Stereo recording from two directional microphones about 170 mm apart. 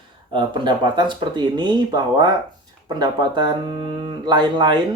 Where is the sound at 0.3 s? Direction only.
30° right (ahead or behind).